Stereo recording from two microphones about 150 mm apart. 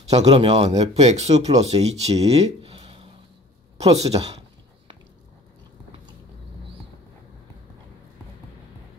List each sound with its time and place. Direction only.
0.1 s speech: 45° right (ahead or behind)